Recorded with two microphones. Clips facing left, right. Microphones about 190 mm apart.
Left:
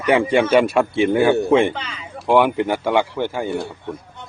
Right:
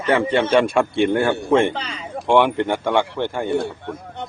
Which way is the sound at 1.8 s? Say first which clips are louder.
Right 2 dB; 40° right (ahead or behind).